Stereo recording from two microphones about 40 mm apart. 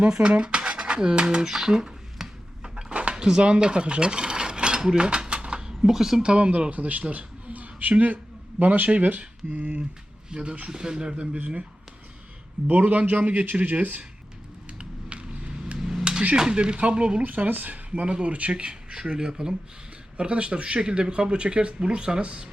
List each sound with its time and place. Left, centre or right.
0.1 s a sound: right
2.9 s a sound: right
3.2 s mechanisms: right
5.8 s speech: centre
6.2 s a man's voice: right
9.5 s speech: right
11.3 s speech: right
12.6 s speech: right
14.8 s a sound: right
15.8 s a sound: centre
16.3 s speech: right
17.2 s speech: right
18.5 s speech: right
20.1 s speech: right